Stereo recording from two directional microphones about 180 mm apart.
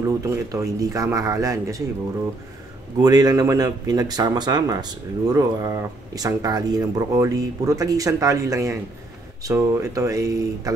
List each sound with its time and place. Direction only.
0.2 s speech: 15° right (ahead or behind)
3.0 s speech: 20° right (ahead or behind)